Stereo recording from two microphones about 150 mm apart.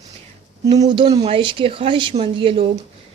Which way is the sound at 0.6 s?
25° right (ahead or behind).